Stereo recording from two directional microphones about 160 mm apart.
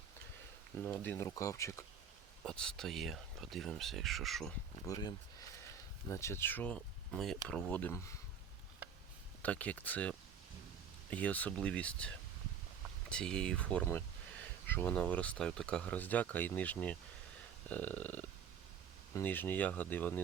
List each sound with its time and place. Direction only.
0.9 s speech: 10° left (ahead or behind)
2.4 s speech: 5° left (ahead or behind)
4.9 s speech: 25° left (ahead or behind)
9.4 s speech: 10° left (ahead or behind)